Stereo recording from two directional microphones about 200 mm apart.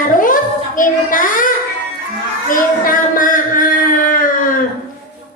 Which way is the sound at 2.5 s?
40° left (ahead or behind).